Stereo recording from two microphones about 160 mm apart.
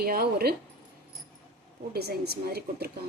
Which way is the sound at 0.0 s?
70° right (ahead or behind).